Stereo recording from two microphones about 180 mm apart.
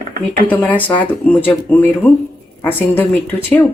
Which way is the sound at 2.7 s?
10° left (ahead or behind).